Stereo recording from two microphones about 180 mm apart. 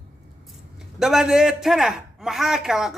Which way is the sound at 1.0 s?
Centre (ahead or behind).